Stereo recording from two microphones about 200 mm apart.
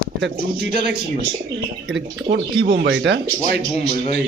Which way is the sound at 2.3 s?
50° right (ahead or behind).